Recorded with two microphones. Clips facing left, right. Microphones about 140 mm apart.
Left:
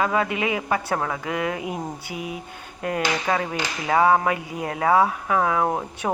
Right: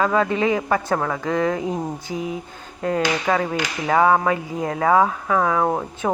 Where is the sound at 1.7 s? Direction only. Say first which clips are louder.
Right 4 dB; 15° left (ahead or behind).